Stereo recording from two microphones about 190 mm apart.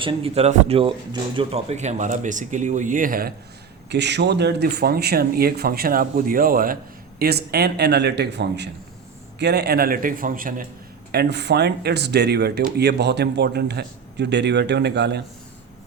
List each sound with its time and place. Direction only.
0.0 s speech: 30° right (ahead or behind); by 3.3 s 50° right (ahead or behind)
3.8 s speech: 65° right (ahead or behind); by 10.7 s 45° right (ahead or behind)
11.1 s speech: 60° right (ahead or behind)